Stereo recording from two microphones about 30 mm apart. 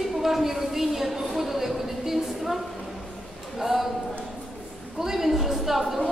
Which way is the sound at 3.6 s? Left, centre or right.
Centre.